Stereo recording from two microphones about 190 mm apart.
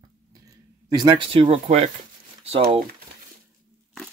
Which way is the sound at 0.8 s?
20° right (ahead or behind).